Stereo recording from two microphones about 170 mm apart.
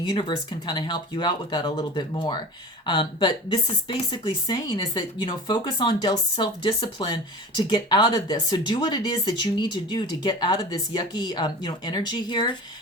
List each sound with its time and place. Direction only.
0.0 s a woman's voice: 30° left (ahead or behind)